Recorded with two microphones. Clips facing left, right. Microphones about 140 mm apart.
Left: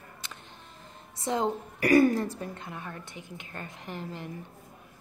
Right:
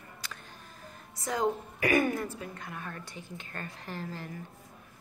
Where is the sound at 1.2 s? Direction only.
25° left (ahead or behind).